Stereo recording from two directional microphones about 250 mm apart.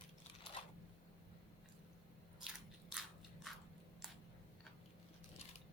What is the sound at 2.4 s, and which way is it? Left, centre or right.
Biting, centre.